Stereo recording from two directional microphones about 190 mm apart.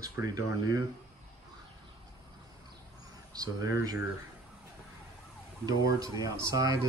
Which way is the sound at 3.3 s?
20° right (ahead or behind).